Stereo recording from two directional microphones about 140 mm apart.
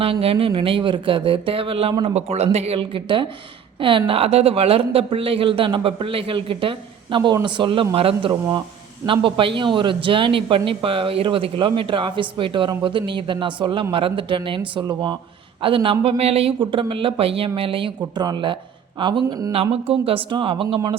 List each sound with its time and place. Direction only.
0.0 s speech: 45° right (ahead or behind)
2.1 s speech: 50° right (ahead or behind); by 19.5 s 30° right (ahead or behind)
19.5 s speech: 45° right (ahead or behind)